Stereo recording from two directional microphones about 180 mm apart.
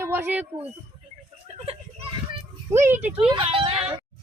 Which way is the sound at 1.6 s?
30° right (ahead or behind).